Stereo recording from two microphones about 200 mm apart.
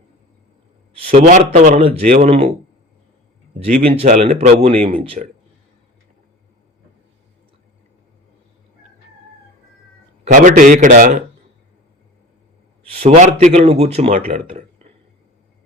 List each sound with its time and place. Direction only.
1.1 s a man's voice: 35° right (ahead or behind)
3.6 s a man's voice: 30° right (ahead or behind)
10.2 s a man's voice: 40° right (ahead or behind)
13.0 s a man's voice: 35° right (ahead or behind)